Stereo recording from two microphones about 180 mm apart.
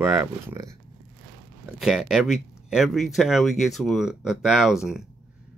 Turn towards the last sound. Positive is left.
turn(degrees=-5)  # may be behind; listen again after turning